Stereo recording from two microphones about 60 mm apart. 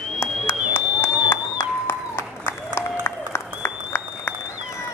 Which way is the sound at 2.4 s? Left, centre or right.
Left.